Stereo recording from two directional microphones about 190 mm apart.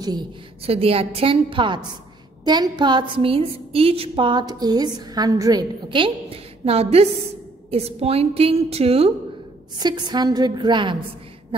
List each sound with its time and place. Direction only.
0.0 s a woman's voice: 20° right (ahead or behind)